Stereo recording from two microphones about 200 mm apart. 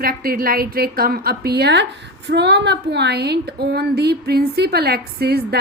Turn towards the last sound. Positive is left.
turn(degrees=-55)  # may be behind; listen again after turning